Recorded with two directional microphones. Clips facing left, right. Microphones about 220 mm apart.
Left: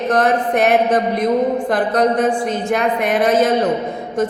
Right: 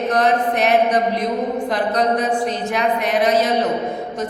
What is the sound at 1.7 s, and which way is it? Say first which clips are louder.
A woman's voice: left 1 dB; 50° left (ahead or behind).